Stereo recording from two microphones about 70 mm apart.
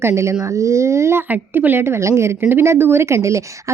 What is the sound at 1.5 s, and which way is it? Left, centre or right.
A woman's voice, right.